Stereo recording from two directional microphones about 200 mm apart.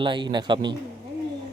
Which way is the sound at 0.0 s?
25° right (ahead or behind).